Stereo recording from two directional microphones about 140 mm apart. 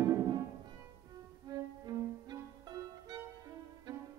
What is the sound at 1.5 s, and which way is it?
Music, 30° right (ahead or behind).